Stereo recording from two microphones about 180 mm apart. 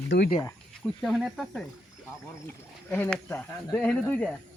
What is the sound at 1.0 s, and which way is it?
Speech, centre (ahead or behind).